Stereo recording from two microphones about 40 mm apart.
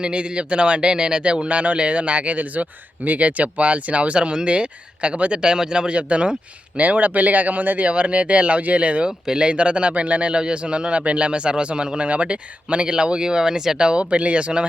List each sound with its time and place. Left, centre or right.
0.0 s a man's voice: right
5.4 s a man's voice: centre
6.0 s a man's voice: right